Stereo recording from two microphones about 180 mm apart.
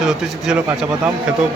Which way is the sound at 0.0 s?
Centre (ahead or behind).